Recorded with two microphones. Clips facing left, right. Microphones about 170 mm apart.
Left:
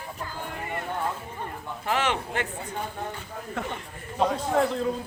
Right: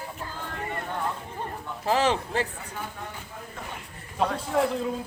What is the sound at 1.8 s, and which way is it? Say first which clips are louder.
Speech: right 3 dB; 35° right (ahead or behind).